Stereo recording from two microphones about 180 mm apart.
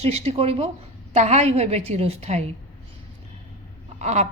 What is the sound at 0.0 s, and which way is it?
Speech, 35° right (ahead or behind).